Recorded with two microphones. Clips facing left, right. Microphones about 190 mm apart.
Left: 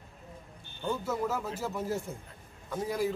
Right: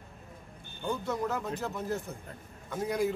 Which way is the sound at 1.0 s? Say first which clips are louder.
Even; 5° left (ahead or behind).